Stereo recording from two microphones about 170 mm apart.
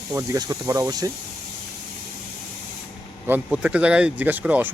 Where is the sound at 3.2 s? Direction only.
10° right (ahead or behind).